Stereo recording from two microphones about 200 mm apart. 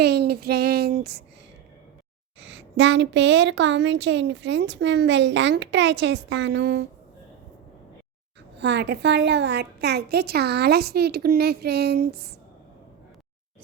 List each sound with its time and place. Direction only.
0.0 s a woman's voice: 55° right (ahead or behind)
2.4 s a woman's voice: 65° right (ahead or behind)
8.5 s a woman's voice: 60° right (ahead or behind)